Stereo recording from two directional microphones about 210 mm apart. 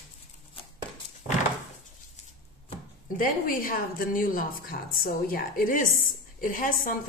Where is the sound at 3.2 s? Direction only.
40° left (ahead or behind).